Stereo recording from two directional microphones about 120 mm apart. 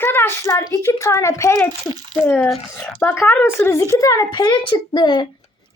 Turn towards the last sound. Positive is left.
turn(degrees=40)  # may be behind; listen again after turning